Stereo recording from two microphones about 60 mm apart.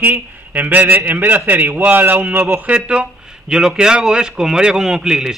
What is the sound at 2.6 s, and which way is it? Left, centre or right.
A man's voice, centre.